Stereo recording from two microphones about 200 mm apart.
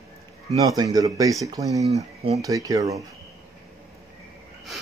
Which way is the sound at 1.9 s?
30° right (ahead or behind).